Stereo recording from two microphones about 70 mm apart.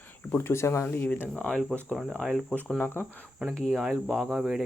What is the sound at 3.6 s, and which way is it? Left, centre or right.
Speech, centre.